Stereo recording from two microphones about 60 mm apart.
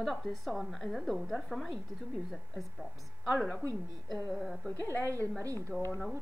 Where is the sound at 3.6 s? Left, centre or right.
Right.